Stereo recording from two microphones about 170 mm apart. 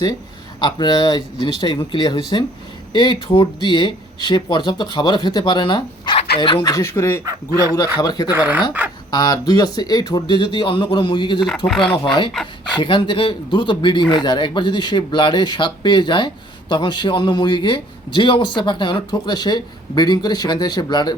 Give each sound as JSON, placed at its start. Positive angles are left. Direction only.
{"t": 0.6, "sound": "speech", "side_deg": 25}
{"t": 7.3, "sound": "speech", "side_deg": -20}
{"t": 7.9, "sound": "speech", "side_deg": 25}
{"t": 8.3, "sound": "speech", "side_deg": -10}
{"t": 9.0, "sound": "speech", "side_deg": 25}
{"t": 11.3, "sound": "speech", "side_deg": 0}
{"t": 12.7, "sound": "speech", "side_deg": 30}